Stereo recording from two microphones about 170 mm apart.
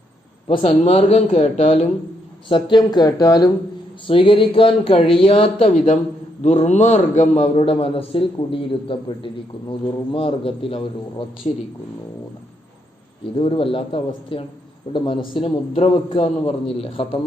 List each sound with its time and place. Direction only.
0.4 s a man's voice: 35° left (ahead or behind)
2.5 s a man's voice: 25° left (ahead or behind)
13.4 s a man's voice: 30° left (ahead or behind)